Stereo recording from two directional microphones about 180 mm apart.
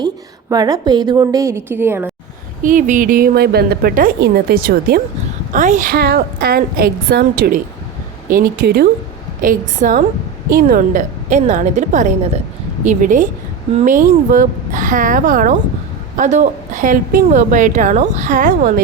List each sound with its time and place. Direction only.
0.5 s a woman's voice: 20° right (ahead or behind)
2.6 s a woman's voice: 45° right (ahead or behind)
5.5 s a woman's voice: 45° right (ahead or behind); by 8.9 s 60° right (ahead or behind)
9.4 s a woman's voice: 50° right (ahead or behind)